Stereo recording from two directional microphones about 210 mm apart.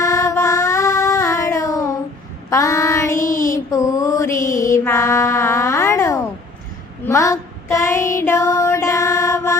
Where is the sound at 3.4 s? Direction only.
15° left (ahead or behind).